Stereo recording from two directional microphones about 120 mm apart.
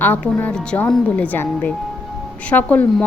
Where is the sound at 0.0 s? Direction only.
15° left (ahead or behind).